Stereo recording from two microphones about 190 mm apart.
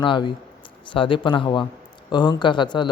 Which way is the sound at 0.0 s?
25° left (ahead or behind).